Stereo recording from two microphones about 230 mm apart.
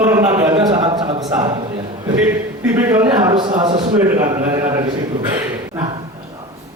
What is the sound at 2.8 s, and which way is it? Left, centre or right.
Speech, centre.